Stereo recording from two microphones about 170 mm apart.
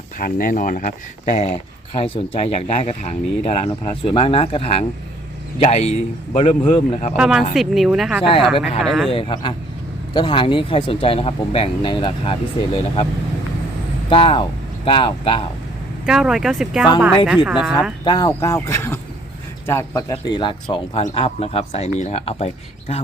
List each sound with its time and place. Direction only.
0.2 s speech: 55° left (ahead or behind)
7.2 s speech: centre (ahead or behind)
9.0 s speech: 30° left (ahead or behind)
14.1 s speech: 30° left (ahead or behind)
16.0 s speech: 5° right (ahead or behind)
18.0 s speech: 25° left (ahead or behind)